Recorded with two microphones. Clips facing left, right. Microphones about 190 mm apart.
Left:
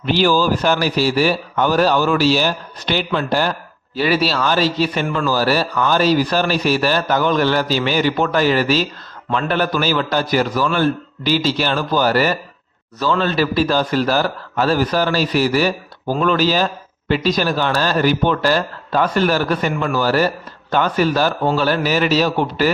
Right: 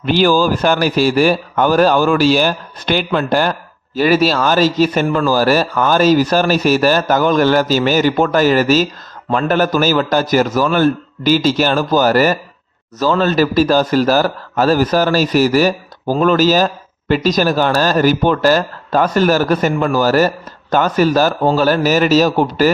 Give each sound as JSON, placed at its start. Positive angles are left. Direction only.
{"t": 0.0, "sound": "speech", "side_deg": -50}